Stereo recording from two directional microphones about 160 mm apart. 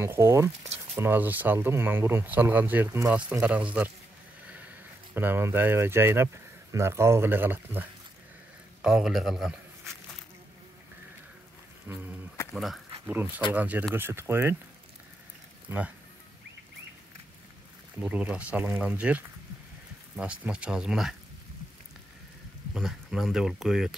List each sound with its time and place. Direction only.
0.0 s speech: 15° right (ahead or behind)
5.1 s speech: 15° right (ahead or behind)
11.9 s speech: 10° right (ahead or behind)
12.5 s a sound: centre (ahead or behind)
13.1 s speech: 10° right (ahead or behind)
15.7 s speech: 15° right (ahead or behind)
17.9 s speech: 10° right (ahead or behind)
22.8 s speech: centre (ahead or behind)